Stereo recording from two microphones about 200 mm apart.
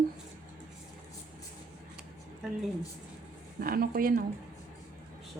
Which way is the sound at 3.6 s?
45° right (ahead or behind).